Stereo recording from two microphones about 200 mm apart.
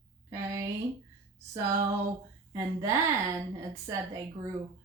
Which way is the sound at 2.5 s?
15° right (ahead or behind).